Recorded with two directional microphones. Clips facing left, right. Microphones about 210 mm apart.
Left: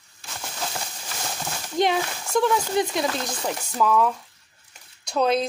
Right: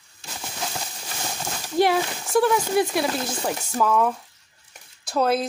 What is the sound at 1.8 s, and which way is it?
Speech, 5° right (ahead or behind).